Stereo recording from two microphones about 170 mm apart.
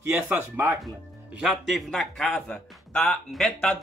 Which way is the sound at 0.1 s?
10° right (ahead or behind).